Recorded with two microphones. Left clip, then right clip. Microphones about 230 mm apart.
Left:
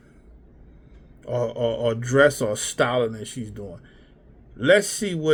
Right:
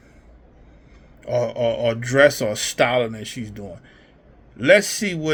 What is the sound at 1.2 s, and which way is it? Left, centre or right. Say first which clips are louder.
Speech: right 3 dB; right.